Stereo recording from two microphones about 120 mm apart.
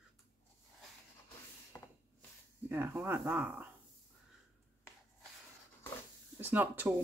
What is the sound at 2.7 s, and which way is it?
Speech, 15° right (ahead or behind).